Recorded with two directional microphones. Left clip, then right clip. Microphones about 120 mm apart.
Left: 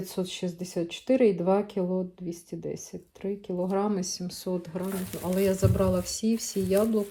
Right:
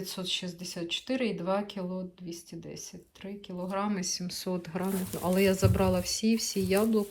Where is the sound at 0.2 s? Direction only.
70° left (ahead or behind).